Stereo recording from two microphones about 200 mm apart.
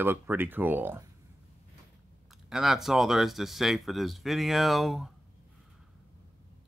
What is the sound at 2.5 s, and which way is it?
Speech, centre (ahead or behind).